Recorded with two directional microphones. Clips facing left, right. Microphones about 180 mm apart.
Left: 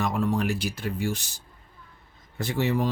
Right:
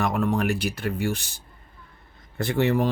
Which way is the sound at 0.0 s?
55° right (ahead or behind).